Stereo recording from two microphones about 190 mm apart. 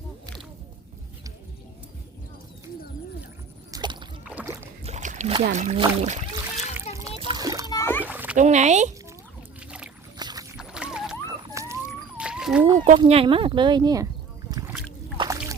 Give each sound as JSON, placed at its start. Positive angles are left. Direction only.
{"t": 3.7, "sound": "rowboat", "side_deg": -25}
{"t": 4.3, "sound": "boat", "side_deg": -10}
{"t": 4.8, "sound": "a sound", "side_deg": -35}
{"t": 5.8, "sound": "speech", "side_deg": -35}
{"t": 7.2, "sound": "music", "side_deg": -25}
{"t": 7.7, "sound": "music", "side_deg": 15}
{"t": 8.0, "sound": "cat", "side_deg": -10}
{"t": 8.4, "sound": "speech", "side_deg": -35}
{"t": 10.2, "sound": "rowboat", "side_deg": -20}
{"t": 10.6, "sound": "a sound", "side_deg": -5}
{"t": 11.3, "sound": "a sound", "side_deg": -15}
{"t": 13.0, "sound": "speech", "side_deg": -30}
{"t": 14.5, "sound": "rowboat", "side_deg": -15}
{"t": 15.2, "sound": "boat", "side_deg": -15}